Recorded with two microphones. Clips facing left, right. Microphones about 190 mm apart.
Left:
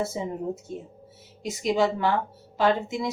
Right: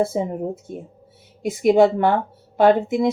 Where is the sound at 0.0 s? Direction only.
55° right (ahead or behind).